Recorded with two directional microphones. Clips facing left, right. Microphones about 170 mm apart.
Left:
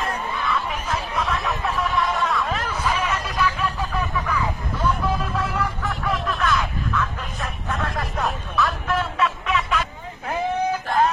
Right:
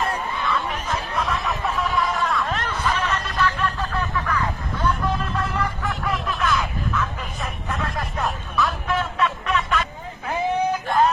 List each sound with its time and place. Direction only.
0.0 s chatter: centre (ahead or behind)